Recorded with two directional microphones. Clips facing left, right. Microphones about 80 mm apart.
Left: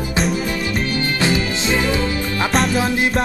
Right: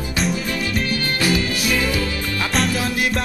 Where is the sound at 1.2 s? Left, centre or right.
Left.